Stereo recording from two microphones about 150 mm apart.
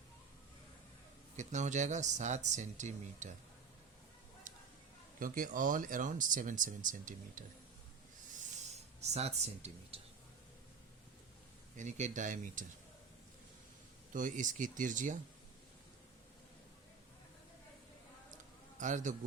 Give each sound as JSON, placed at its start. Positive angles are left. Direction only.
{"t": 1.4, "sound": "speech", "side_deg": -55}
{"t": 4.5, "sound": "a sound", "side_deg": -65}
{"t": 5.2, "sound": "speech", "side_deg": -65}
{"t": 8.3, "sound": "writing", "side_deg": -50}
{"t": 11.8, "sound": "speech", "side_deg": -55}
{"t": 14.1, "sound": "speech", "side_deg": -60}
{"t": 18.8, "sound": "speech", "side_deg": -55}